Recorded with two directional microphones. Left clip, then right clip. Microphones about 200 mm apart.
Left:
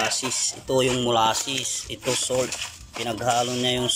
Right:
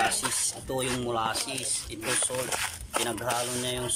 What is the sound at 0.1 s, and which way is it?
Speech, 5° left (ahead or behind).